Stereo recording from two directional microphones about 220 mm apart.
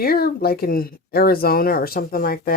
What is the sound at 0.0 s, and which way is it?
Speech, 45° left (ahead or behind).